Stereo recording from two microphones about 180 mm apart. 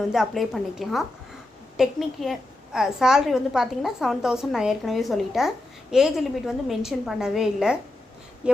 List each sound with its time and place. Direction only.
0.1 s a woman's voice: centre (ahead or behind)